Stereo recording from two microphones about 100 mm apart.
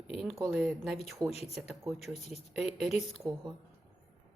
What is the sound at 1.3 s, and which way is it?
Speech, 90° left.